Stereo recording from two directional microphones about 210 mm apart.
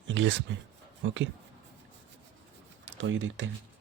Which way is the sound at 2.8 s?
60° right (ahead or behind).